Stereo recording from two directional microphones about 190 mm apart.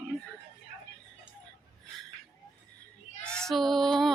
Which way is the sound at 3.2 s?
5° left (ahead or behind).